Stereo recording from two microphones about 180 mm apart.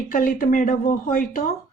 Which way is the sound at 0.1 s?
50° left (ahead or behind).